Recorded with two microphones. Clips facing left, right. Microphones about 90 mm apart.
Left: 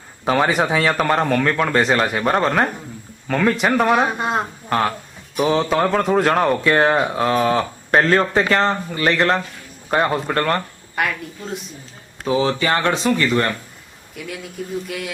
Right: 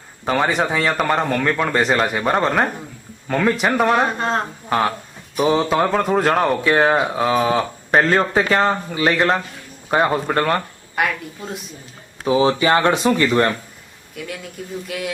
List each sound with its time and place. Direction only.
0.3 s speech: 5° left (ahead or behind)
4.7 s speech: 5° right (ahead or behind)
12.2 s speech: 15° right (ahead or behind)
14.2 s speech: centre (ahead or behind)